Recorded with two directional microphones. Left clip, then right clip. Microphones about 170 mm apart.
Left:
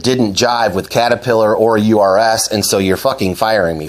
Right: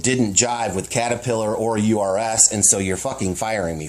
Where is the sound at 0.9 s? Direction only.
30° left (ahead or behind).